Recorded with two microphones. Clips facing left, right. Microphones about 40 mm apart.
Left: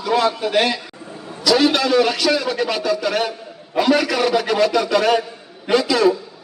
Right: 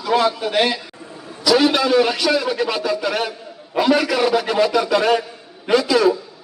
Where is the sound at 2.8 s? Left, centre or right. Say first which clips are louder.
Left 1 dB; centre.